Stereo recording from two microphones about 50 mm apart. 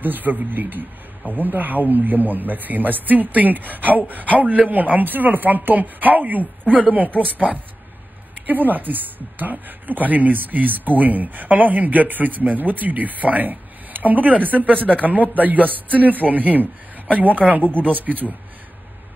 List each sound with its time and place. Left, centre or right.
0.0 s a woman's voice: right
8.4 s a woman's voice: right